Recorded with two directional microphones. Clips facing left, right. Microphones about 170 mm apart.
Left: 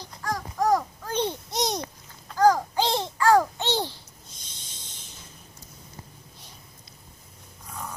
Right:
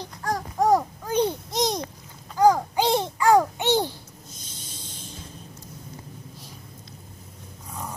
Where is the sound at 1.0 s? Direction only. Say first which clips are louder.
Right 4 dB; 10° right (ahead or behind).